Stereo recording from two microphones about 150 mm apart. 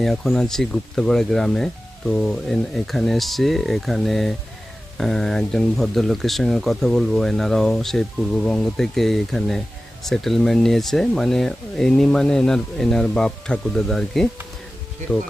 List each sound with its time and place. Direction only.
0.0 s speech: 5° left (ahead or behind)